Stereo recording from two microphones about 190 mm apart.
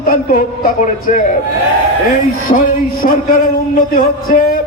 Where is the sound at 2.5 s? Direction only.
40° left (ahead or behind).